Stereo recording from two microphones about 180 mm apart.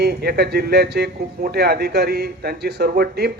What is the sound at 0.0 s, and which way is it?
Speech, 60° right (ahead or behind).